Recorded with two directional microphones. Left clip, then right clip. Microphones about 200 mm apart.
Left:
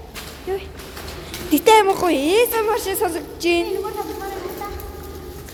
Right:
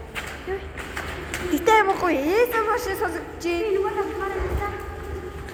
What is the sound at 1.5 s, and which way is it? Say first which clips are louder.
Speech: left 5 dB; 45° left (ahead or behind).